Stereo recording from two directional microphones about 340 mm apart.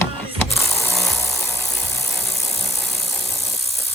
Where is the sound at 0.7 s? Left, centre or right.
Centre.